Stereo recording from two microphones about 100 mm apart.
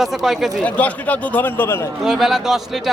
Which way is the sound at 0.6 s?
15° left (ahead or behind).